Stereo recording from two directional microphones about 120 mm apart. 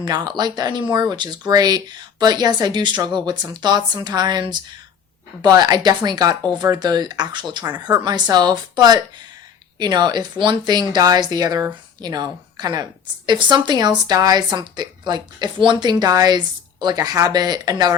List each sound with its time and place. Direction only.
0.0 s speech: 35° right (ahead or behind)